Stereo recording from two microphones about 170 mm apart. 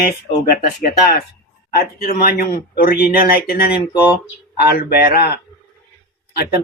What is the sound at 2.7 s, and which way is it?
Speech, 65° left (ahead or behind).